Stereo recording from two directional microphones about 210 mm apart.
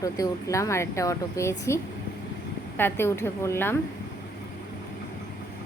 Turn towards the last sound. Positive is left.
turn(degrees=10)  # may be behind; listen again after turning